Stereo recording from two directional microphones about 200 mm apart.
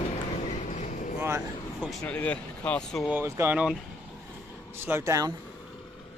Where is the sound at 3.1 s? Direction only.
10° right (ahead or behind).